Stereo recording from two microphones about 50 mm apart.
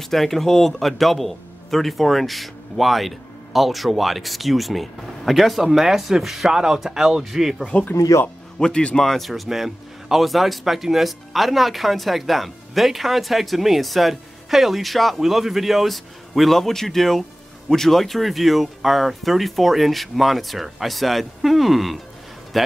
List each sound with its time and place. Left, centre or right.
0.0 s a man's voice: centre
7.6 s speech: left
8.1 s speech: left
8.5 s speech: centre
9.0 s a man's voice: centre